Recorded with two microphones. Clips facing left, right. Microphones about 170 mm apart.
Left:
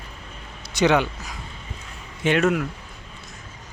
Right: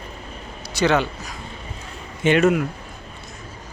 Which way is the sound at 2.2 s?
Centre (ahead or behind).